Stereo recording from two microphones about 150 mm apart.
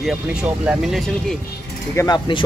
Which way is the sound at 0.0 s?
5° right (ahead or behind).